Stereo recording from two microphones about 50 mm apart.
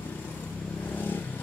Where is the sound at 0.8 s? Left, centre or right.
Left.